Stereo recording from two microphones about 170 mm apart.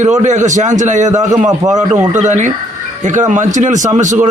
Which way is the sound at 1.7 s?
45° right (ahead or behind).